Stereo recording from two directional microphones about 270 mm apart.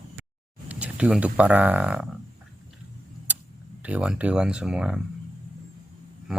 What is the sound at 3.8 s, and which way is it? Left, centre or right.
Speech, centre.